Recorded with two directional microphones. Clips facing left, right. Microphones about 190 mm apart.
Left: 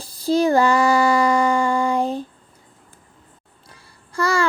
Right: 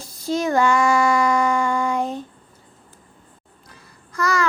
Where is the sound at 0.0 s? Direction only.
35° left (ahead or behind).